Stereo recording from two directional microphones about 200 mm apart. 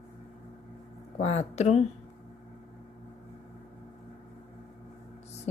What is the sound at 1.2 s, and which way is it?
Speech, 35° left (ahead or behind).